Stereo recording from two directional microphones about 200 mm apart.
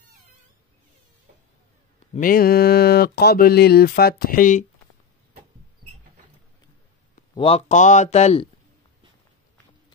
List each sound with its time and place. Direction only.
2.1 s speech: 45° left (ahead or behind)
7.3 s speech: 30° left (ahead or behind)